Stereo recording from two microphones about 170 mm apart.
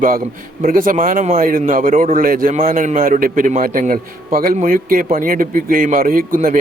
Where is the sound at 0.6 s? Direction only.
50° right (ahead or behind).